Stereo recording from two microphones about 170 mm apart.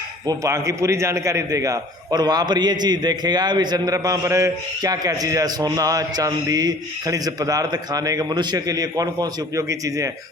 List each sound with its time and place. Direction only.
0.3 s a man's voice: 20° right (ahead or behind)